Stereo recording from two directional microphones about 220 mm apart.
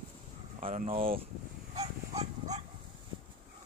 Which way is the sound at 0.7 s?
40° right (ahead or behind).